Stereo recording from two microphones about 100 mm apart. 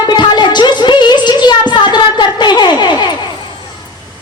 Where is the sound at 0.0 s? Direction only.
50° left (ahead or behind).